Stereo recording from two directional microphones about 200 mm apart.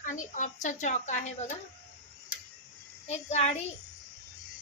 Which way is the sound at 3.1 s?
35° left (ahead or behind).